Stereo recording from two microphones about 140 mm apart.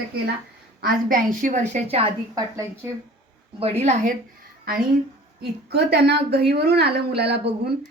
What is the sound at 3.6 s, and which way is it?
Speech, 50° right (ahead or behind).